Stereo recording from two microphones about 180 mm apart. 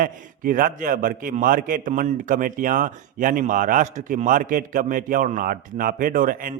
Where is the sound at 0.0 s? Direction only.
50° right (ahead or behind).